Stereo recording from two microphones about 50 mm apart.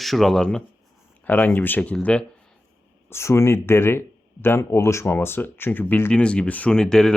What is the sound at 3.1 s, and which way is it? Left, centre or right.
Speech, left.